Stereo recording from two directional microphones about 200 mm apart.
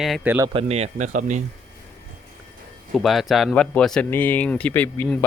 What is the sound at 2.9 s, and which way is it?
Speech, centre (ahead or behind).